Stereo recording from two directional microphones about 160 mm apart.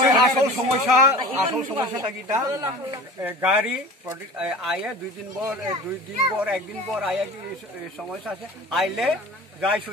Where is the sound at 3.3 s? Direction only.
10° right (ahead or behind).